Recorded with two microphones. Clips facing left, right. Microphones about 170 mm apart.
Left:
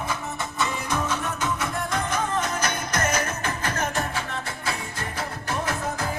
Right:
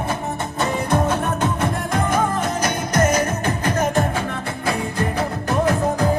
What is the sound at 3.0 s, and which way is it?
Music, 35° right (ahead or behind).